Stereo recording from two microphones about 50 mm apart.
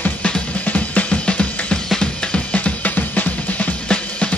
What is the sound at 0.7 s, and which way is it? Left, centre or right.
Music, left.